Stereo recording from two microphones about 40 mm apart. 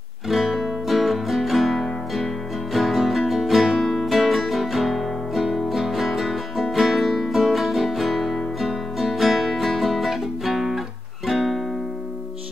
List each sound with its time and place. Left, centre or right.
0.3 s music: centre